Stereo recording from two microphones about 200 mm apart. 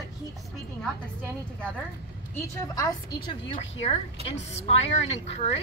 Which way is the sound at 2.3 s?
20° left (ahead or behind).